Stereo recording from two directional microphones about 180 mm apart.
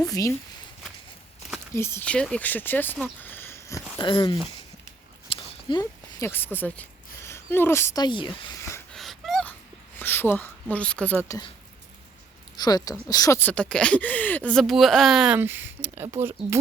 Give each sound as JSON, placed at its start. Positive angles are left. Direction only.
{"t": 0.0, "sound": "speech", "side_deg": 20}
{"t": 1.7, "sound": "speech", "side_deg": 15}
{"t": 3.2, "sound": "a sound", "side_deg": 10}
{"t": 7.3, "sound": "speech", "side_deg": 15}
{"t": 8.9, "sound": "a sound", "side_deg": 0}
{"t": 10.0, "sound": "speech", "side_deg": 10}
{"t": 12.5, "sound": "speech", "side_deg": 20}